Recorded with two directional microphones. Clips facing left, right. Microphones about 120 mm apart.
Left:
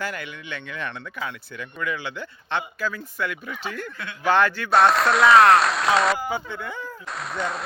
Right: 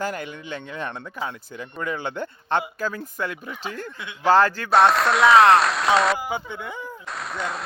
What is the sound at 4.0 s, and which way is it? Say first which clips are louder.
Speech: right 3 dB; 20° right (ahead or behind).